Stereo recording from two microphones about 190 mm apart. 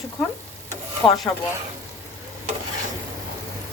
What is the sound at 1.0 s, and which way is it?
Speech, 20° left (ahead or behind).